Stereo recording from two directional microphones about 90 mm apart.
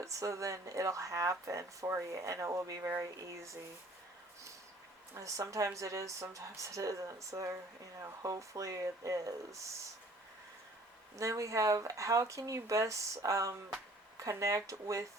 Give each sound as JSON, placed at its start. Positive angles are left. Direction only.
{"t": 0.0, "sound": "speech", "side_deg": -35}
{"t": 5.1, "sound": "speech", "side_deg": -35}
{"t": 11.2, "sound": "speech", "side_deg": -35}